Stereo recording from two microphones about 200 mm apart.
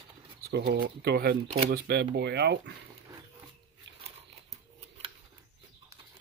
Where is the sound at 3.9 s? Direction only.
65° right (ahead or behind).